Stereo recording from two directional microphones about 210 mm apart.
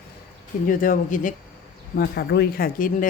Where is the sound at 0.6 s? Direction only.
40° left (ahead or behind).